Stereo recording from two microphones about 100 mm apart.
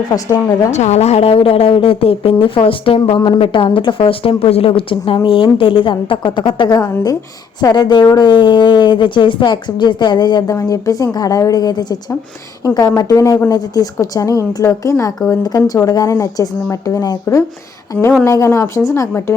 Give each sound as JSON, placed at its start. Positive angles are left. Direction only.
{"t": 0.1, "sound": "a woman's voice", "side_deg": 30}
{"t": 0.9, "sound": "speech", "side_deg": 90}
{"t": 6.7, "sound": "speech", "side_deg": 25}
{"t": 7.6, "sound": "speech", "side_deg": 45}
{"t": 10.5, "sound": "a woman's voice", "side_deg": 35}
{"t": 13.0, "sound": "a woman's voice", "side_deg": 35}
{"t": 17.9, "sound": "speech", "side_deg": 15}
{"t": 18.3, "sound": "speech", "side_deg": 30}